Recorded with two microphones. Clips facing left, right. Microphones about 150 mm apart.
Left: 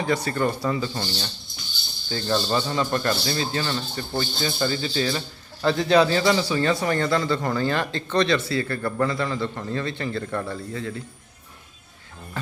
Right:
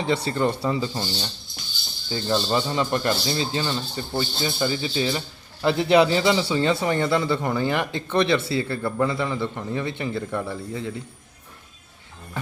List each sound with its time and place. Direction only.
0.0 s speech: 25° right (ahead or behind)